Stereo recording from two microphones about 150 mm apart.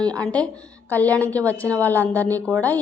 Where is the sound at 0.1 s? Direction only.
5° left (ahead or behind).